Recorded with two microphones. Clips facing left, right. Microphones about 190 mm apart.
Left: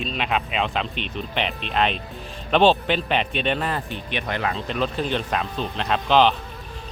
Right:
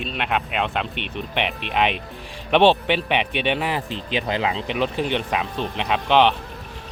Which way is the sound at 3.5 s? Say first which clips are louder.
Right 2 dB; 10° right (ahead or behind).